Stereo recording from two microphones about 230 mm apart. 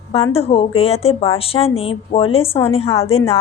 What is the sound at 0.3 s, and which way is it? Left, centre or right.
Speech, left.